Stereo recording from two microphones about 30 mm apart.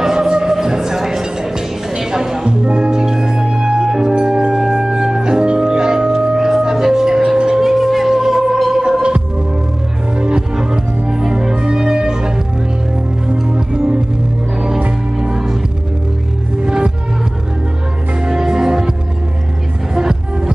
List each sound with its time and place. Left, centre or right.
0.0 s music: right
2.6 s music: right
7.3 s a sound: right
7.6 s music: centre
10.1 s music: right
10.5 s music: right
15.1 s music: centre
16.6 s music: right
18.2 s music: right